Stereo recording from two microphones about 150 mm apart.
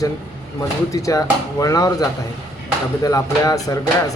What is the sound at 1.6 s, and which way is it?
Speech, 25° left (ahead or behind).